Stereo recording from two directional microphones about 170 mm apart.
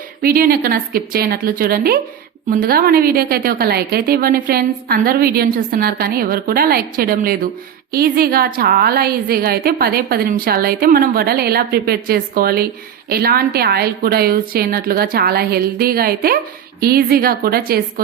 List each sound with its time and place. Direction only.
0.2 s a woman's voice: 60° right (ahead or behind)